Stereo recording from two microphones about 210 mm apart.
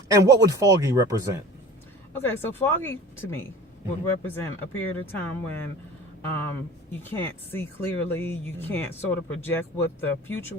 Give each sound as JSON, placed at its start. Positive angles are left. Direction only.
{"t": 0.1, "sound": "speech", "side_deg": -15}
{"t": 2.2, "sound": "speech", "side_deg": 10}
{"t": 7.0, "sound": "speech", "side_deg": 10}